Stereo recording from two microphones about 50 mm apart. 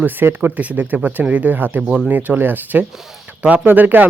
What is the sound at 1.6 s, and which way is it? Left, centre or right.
Speech, right.